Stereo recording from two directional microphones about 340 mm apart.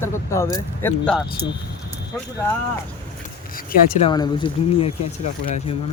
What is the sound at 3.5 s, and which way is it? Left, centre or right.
Speech, left.